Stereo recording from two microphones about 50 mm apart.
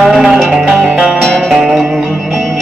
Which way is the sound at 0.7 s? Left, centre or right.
Centre.